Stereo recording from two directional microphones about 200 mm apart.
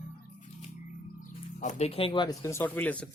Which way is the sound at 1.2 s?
35° left (ahead or behind).